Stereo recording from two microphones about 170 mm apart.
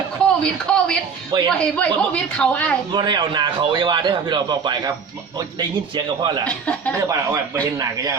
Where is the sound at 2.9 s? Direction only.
25° right (ahead or behind).